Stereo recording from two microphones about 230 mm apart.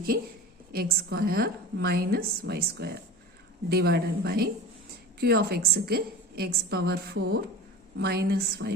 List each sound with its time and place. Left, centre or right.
0.1 s a woman's voice: right